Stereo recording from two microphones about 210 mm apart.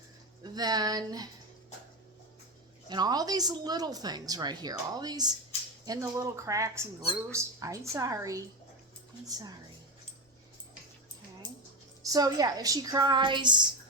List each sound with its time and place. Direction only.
0.4 s speech: 20° right (ahead or behind)
2.9 s speech: 20° right (ahead or behind)
12.0 s speech: 15° right (ahead or behind)